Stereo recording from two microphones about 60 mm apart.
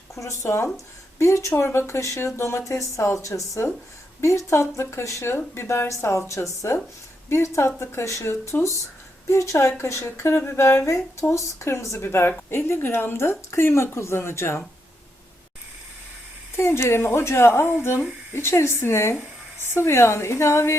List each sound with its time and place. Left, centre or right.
0.1 s a woman's voice: left
11.9 s a woman's voice: left
16.6 s a woman's voice: left